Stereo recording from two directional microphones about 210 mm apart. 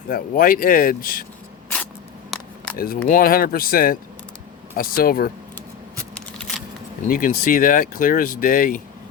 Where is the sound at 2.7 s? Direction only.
45° left (ahead or behind).